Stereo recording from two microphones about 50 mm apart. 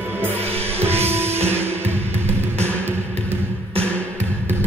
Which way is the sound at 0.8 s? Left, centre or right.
Right.